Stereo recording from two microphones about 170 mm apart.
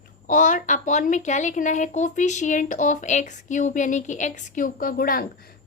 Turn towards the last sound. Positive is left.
turn(degrees=60)  # may be behind; listen again after turning